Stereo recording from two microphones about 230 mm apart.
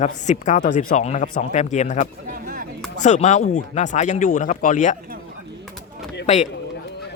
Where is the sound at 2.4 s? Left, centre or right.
Right.